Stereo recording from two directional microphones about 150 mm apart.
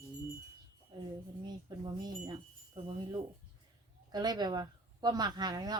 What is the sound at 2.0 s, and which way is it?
Chime, 25° right (ahead or behind).